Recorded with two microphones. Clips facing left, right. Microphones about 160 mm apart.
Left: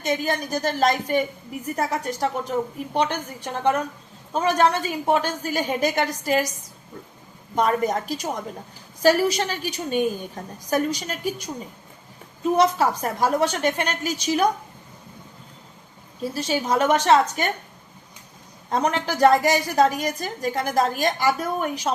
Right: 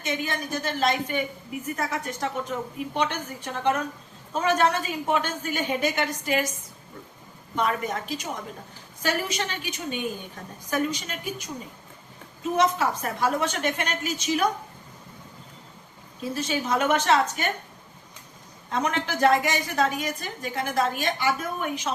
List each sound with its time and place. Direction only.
0.0 s a woman's voice: 40° left (ahead or behind)
16.3 s a woman's voice: 35° left (ahead or behind)
18.7 s a woman's voice: 35° left (ahead or behind)